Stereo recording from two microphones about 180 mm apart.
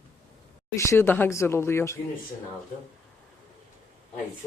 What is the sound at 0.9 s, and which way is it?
Speech, 15° left (ahead or behind).